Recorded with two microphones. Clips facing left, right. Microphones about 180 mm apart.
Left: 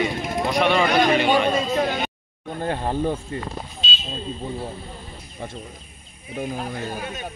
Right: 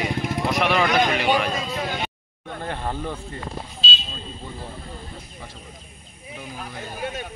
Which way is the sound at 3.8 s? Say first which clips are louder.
Right 4 dB; 30° right (ahead or behind).